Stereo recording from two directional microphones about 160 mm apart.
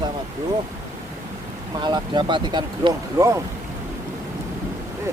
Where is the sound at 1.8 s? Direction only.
25° right (ahead or behind).